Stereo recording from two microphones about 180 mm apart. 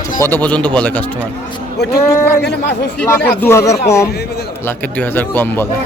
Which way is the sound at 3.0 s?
10° left (ahead or behind).